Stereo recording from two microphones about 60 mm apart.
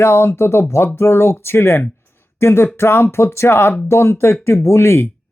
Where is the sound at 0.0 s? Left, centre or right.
Left.